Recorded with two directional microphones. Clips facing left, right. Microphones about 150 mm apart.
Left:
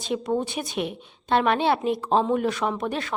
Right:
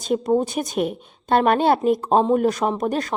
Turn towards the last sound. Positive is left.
turn(degrees=-40)  # may be behind; listen again after turning